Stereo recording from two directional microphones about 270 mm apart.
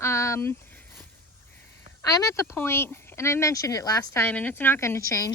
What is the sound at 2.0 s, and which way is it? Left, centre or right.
Speech, centre.